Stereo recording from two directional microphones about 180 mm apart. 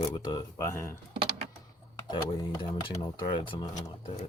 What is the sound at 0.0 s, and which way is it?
Speech, 25° left (ahead or behind).